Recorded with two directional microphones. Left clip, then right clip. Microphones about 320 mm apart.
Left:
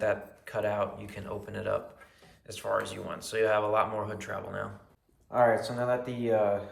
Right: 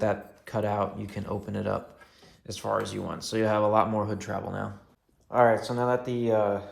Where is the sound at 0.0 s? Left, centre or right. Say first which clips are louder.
Right 2 dB; centre.